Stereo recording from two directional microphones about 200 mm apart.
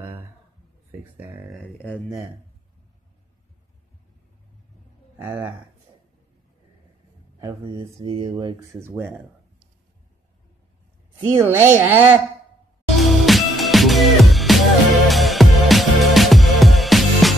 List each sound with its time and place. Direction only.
1.1 s speech: 15° right (ahead or behind)
1.8 s speech: 10° left (ahead or behind)
5.2 s speech: 5° right (ahead or behind)
7.3 s speech: 20° right (ahead or behind)
11.1 s speech: 15° right (ahead or behind)
12.9 s music: centre (ahead or behind)